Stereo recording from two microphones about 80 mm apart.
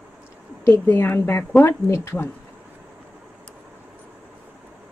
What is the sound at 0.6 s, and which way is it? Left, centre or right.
A woman's voice, left.